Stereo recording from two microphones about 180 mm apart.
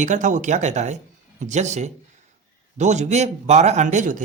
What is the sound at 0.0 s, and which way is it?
Speech, 45° right (ahead or behind).